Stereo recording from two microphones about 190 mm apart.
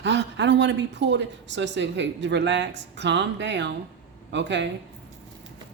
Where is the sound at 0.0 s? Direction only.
65° right (ahead or behind).